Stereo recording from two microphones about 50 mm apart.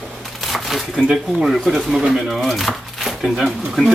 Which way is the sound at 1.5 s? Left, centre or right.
Centre.